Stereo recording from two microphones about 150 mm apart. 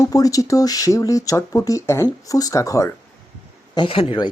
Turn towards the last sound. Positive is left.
turn(degrees=35)  # may be behind; listen again after turning